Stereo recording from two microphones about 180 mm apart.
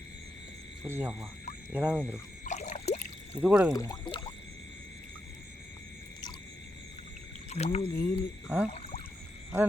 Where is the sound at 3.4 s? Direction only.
5° right (ahead or behind).